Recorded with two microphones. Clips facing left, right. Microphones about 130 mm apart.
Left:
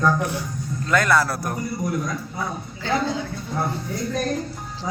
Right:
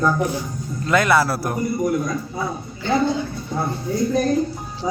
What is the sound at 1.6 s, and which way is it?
Speech, 25° right (ahead or behind).